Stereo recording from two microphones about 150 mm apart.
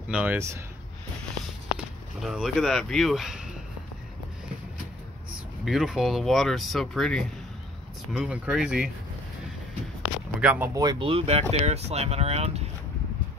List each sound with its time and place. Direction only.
0.1 s speech: 10° right (ahead or behind)
2.2 s speech: centre (ahead or behind)
5.7 s speech: centre (ahead or behind)
10.4 s speech: 10° right (ahead or behind)
10.7 s speech: 25° right (ahead or behind); by 12.6 s 45° right (ahead or behind)